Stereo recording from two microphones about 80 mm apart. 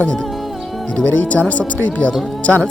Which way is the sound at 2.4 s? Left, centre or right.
Centre.